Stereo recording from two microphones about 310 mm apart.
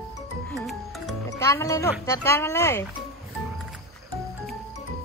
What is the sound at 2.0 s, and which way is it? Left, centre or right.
Speech, centre.